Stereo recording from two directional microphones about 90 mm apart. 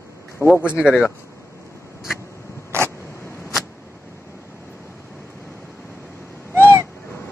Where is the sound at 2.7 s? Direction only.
30° right (ahead or behind).